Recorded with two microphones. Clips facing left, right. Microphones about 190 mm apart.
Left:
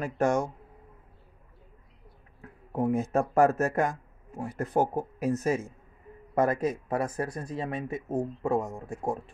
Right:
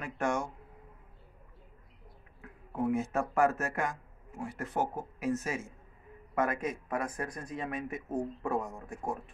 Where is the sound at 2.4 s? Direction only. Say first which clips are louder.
Left 4 dB; 35° left (ahead or behind).